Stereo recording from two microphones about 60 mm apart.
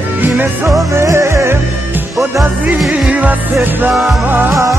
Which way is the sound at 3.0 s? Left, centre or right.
Right.